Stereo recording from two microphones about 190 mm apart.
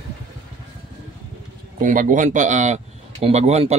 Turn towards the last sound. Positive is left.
turn(degrees=-35)  # may be behind; listen again after turning